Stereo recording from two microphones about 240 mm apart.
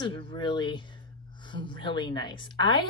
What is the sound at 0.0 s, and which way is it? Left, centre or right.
Speech, left.